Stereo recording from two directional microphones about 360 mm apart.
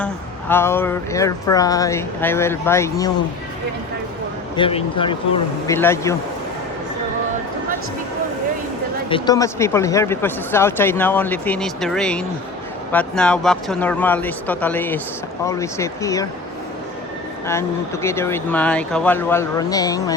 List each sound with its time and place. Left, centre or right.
0.0 s speech: centre
4.5 s speech: centre
9.0 s speech: centre
17.4 s speech: centre